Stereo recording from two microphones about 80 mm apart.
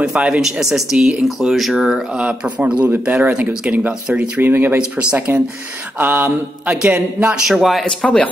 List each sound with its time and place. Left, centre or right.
0.0 s speech: centre
2.2 s a man's voice: centre
7.4 s speech: centre
7.8 s speech: centre